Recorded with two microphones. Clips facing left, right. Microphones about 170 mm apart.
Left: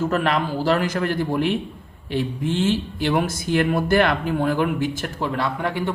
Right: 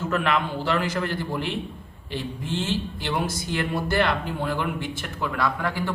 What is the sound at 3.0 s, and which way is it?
Speech, 50° left (ahead or behind).